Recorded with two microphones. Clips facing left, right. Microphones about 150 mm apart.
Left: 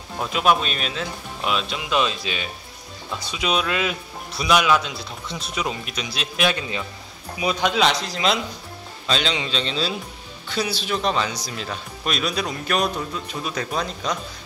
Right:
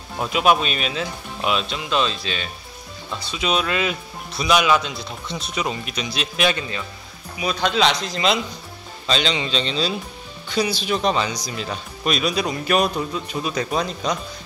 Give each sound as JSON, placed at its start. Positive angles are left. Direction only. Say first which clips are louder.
{"t": 0.2, "sound": "speech", "louder": "right 2 dB", "side_deg": -5}
{"t": 1.9, "sound": "speech", "louder": "even", "side_deg": 10}